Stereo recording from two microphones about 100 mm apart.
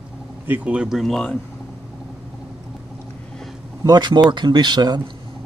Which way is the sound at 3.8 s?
45° right (ahead or behind).